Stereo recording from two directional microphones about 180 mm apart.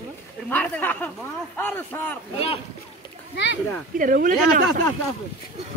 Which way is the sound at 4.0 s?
50° right (ahead or behind).